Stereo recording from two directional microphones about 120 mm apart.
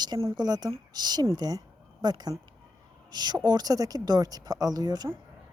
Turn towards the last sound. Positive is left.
turn(degrees=-35)  # may be behind; listen again after turning